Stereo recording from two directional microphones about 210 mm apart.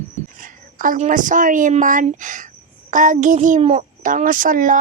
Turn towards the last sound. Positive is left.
turn(degrees=-40)  # may be behind; listen again after turning